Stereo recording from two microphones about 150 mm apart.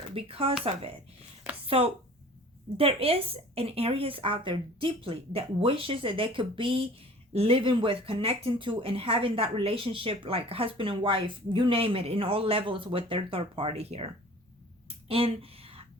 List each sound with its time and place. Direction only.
0.1 s speech: 40° right (ahead or behind)
1.6 s speech: 40° right (ahead or behind)
14.8 s a sound: 40° right (ahead or behind)